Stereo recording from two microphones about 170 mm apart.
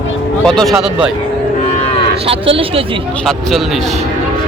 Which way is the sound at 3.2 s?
Centre (ahead or behind).